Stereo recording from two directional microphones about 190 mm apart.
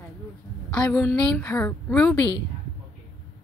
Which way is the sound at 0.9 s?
5° left (ahead or behind).